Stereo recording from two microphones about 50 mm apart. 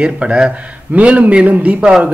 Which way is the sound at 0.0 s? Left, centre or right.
Centre.